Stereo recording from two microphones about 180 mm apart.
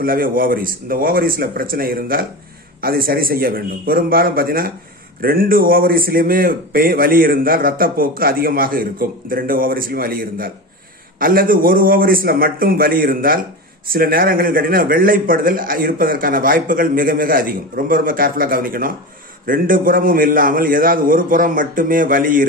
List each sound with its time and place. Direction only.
0.0 s a man's voice: 55° right (ahead or behind)